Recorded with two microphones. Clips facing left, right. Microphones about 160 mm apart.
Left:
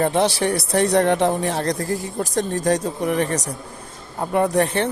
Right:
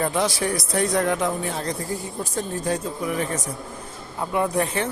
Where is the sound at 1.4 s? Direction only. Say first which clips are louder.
Left 5 dB; 75° left (ahead or behind).